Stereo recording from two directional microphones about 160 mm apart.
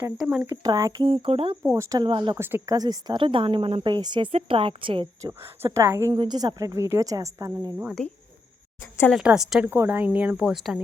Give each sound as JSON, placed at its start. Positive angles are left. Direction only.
{"t": 0.2, "sound": "a woman's voice", "side_deg": -5}
{"t": 0.5, "sound": "a woman's voice", "side_deg": -25}
{"t": 1.0, "sound": "speech", "side_deg": -40}
{"t": 1.6, "sound": "a woman's voice", "side_deg": -20}
{"t": 2.4, "sound": "speech", "side_deg": -15}
{"t": 5.6, "sound": "a woman's voice", "side_deg": -20}
{"t": 8.0, "sound": "a woman's voice", "side_deg": 5}
{"t": 9.1, "sound": "a woman's voice", "side_deg": -5}
{"t": 9.6, "sound": "speech", "side_deg": -15}